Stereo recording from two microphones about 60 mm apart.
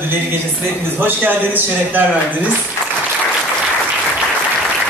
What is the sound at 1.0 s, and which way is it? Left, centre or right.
A man's voice, right.